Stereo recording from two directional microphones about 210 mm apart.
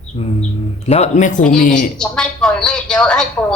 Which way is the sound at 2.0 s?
5° left (ahead or behind).